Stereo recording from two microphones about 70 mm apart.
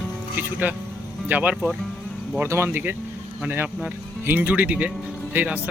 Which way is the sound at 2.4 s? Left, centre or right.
Right.